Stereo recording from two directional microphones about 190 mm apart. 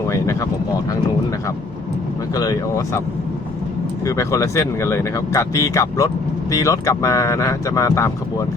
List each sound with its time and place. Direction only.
0.1 s a sound: 15° left (ahead or behind)
2.3 s speech: 20° left (ahead or behind)
4.0 s speech: 15° left (ahead or behind)